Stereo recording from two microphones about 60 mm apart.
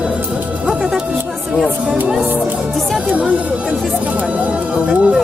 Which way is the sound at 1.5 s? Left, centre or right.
Centre.